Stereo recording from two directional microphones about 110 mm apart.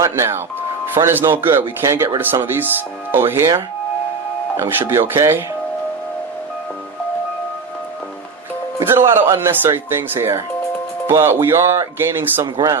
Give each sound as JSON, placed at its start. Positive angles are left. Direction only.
{"t": 0.0, "sound": "speech", "side_deg": -25}
{"t": 4.5, "sound": "speech", "side_deg": -20}
{"t": 8.8, "sound": "speech", "side_deg": -20}